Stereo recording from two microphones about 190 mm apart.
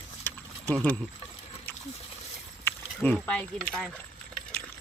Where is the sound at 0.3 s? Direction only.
10° left (ahead or behind).